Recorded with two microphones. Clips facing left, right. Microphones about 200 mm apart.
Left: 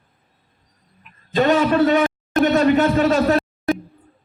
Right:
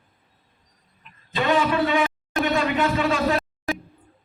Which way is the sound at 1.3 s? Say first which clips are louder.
Left 5 dB; 40° left (ahead or behind).